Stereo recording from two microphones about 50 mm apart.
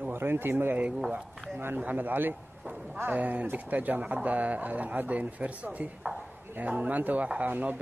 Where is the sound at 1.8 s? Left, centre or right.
Right.